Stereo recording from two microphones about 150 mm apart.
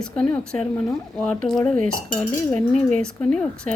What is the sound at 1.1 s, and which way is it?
Speech, 5° left (ahead or behind).